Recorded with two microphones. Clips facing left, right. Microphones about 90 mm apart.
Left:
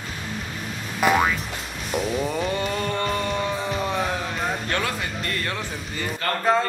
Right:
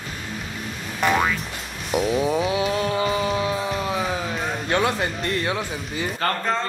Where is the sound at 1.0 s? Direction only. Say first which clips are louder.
Left 1 dB; 5° left (ahead or behind).